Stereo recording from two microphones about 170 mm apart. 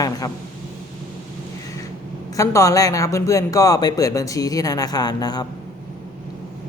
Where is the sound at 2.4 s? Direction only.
20° left (ahead or behind).